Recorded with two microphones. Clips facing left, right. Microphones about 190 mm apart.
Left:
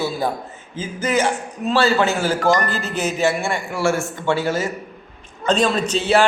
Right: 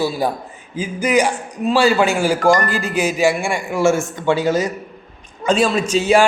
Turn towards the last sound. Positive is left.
turn(degrees=-10)  # may be behind; listen again after turning